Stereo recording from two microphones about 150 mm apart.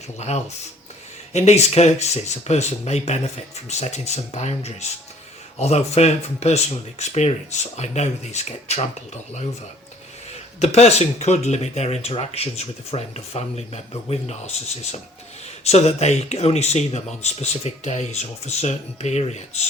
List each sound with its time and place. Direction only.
1.3 s speech: 50° left (ahead or behind)
10.6 s speech: 45° left (ahead or behind)